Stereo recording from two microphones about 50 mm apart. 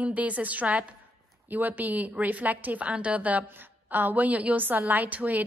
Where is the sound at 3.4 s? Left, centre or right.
Right.